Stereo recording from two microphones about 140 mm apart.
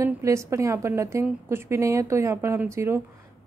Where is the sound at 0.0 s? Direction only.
20° right (ahead or behind).